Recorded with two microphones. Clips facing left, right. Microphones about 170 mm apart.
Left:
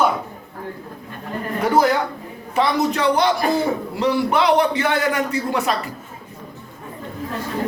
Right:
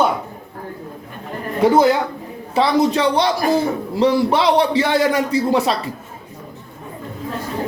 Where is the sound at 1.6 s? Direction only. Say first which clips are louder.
Right 4 dB; 25° right (ahead or behind).